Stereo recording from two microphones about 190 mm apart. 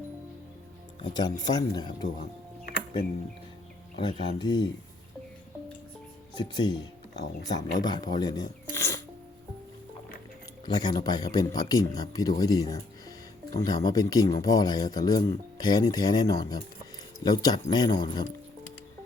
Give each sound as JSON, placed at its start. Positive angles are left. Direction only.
{"t": 1.0, "sound": "speech", "side_deg": 20}
{"t": 3.9, "sound": "speech", "side_deg": 25}
{"t": 6.3, "sound": "speech", "side_deg": 25}
{"t": 10.7, "sound": "speech", "side_deg": 20}